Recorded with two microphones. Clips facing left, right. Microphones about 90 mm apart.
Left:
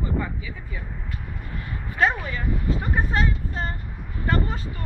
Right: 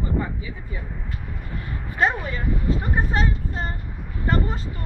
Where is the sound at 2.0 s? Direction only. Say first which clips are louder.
Even; 20° right (ahead or behind).